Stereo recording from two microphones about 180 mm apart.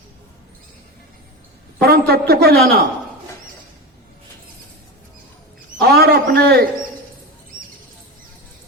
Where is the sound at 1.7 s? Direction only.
60° right (ahead or behind).